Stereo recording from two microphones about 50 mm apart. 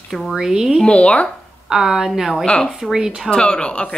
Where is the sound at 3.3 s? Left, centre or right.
Centre.